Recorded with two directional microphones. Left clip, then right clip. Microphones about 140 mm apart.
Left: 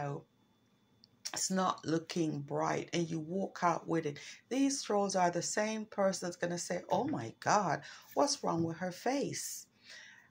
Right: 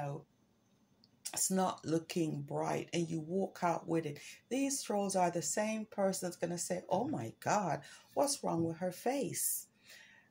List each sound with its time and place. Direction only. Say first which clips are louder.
1.2 s speech: left 1 dB; 15° right (ahead or behind)